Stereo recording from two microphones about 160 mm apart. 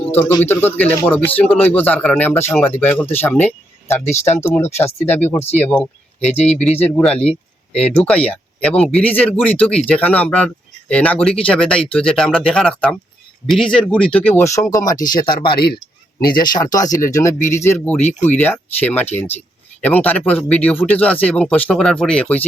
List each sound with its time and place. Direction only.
0.0 s a sound: 10° left (ahead or behind)
0.4 s speech: 15° left (ahead or behind)
6.3 s speech: 45° left (ahead or behind)
6.6 s speech: 10° left (ahead or behind)